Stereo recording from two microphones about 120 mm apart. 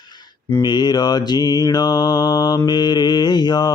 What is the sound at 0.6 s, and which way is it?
Mantra, 35° left (ahead or behind).